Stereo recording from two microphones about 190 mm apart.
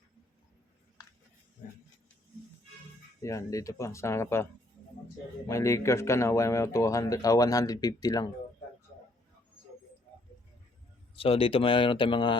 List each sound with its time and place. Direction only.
3.2 s speech: 15° left (ahead or behind)
5.5 s speech: 15° left (ahead or behind)
11.1 s speech: 30° left (ahead or behind)